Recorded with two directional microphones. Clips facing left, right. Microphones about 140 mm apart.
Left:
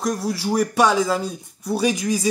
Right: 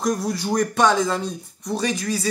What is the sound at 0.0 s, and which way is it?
Speech, centre (ahead or behind).